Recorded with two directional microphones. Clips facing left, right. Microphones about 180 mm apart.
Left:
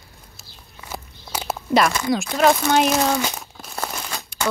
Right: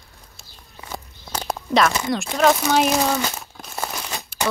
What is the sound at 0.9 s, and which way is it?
Walk, 5° left (ahead or behind).